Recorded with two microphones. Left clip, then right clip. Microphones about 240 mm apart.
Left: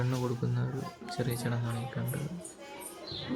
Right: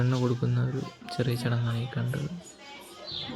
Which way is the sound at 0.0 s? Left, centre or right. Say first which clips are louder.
Right 5 dB; centre.